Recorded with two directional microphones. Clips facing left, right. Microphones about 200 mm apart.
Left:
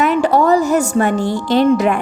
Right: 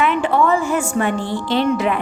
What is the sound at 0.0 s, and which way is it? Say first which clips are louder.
A woman's voice: left 3 dB; 40° left (ahead or behind).